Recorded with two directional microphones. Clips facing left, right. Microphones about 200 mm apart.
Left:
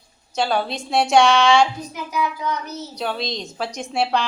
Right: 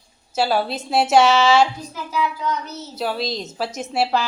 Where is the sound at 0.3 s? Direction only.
5° right (ahead or behind).